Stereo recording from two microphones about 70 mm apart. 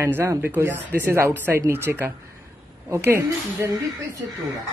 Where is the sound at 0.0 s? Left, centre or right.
Right.